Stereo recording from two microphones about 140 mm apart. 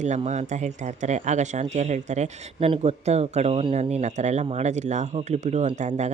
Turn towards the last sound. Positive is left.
turn(degrees=-55)  # may be behind; listen again after turning